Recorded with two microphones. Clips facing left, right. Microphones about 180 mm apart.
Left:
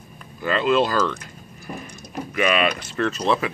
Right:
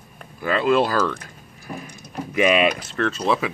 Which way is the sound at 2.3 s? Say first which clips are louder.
Right 3 dB; 15° right (ahead or behind).